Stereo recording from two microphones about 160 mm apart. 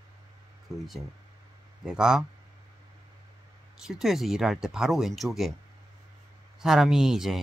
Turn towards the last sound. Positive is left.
turn(degrees=-5)  # may be behind; listen again after turning